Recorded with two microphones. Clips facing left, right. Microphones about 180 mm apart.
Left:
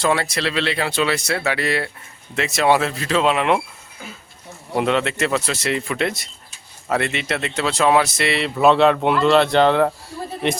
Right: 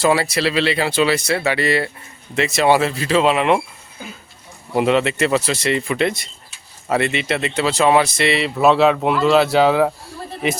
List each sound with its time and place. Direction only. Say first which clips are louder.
0.0 s speech: right 3 dB; 5° right (ahead or behind)
4.7 s speech: right 3 dB; 5° right (ahead or behind)